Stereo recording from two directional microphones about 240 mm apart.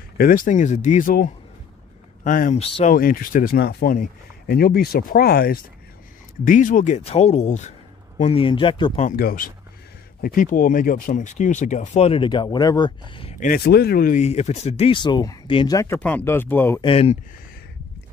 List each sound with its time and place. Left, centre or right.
0.2 s speech: left
2.9 s speech: left
9.1 s speech: left; by 16.8 s centre
16.8 s speech: left